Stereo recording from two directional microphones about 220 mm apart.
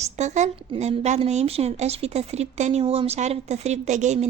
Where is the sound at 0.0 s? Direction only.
30° right (ahead or behind).